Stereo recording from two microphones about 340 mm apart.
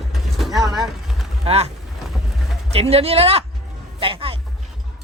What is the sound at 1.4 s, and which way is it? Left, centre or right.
Speech, centre.